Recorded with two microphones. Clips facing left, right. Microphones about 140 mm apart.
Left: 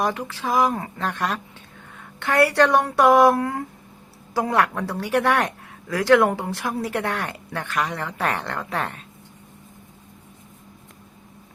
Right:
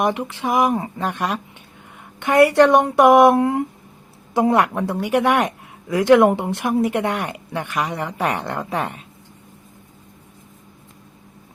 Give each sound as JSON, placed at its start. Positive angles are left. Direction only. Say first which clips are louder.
{"t": 0.0, "sound": "a woman's voice", "louder": "right 4 dB", "side_deg": -20}